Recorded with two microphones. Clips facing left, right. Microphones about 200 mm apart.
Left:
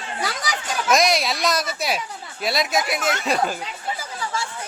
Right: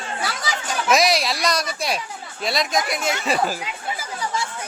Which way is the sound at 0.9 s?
Centre (ahead or behind).